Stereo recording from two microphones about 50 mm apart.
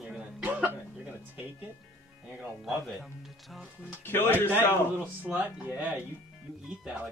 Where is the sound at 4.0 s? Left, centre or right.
Left.